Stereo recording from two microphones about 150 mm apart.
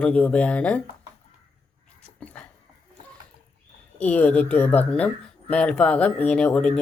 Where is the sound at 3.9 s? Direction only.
10° left (ahead or behind).